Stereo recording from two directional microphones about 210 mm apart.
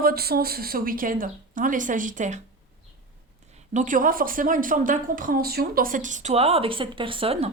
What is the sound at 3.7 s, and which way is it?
Speech, 35° right (ahead or behind).